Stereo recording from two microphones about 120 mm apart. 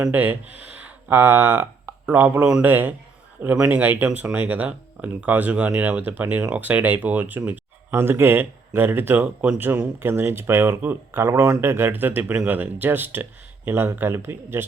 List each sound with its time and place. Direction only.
0.1 s speech: 15° right (ahead or behind)